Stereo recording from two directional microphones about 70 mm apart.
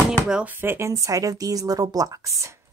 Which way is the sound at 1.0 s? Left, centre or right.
Right.